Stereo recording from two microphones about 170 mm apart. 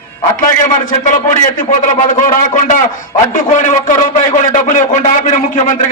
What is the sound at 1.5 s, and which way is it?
A man's voice, 50° left (ahead or behind).